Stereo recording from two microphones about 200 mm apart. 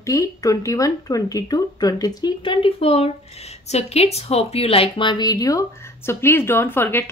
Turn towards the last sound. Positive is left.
turn(degrees=10)  # may be behind; listen again after turning